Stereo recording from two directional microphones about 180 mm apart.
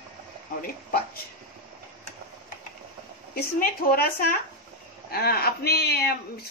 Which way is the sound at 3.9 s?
55° left (ahead or behind).